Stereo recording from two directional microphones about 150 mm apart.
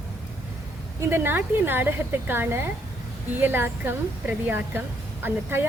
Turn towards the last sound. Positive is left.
turn(degrees=-15)  # may be behind; listen again after turning